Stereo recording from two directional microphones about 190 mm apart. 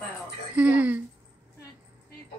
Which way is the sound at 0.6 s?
5° right (ahead or behind).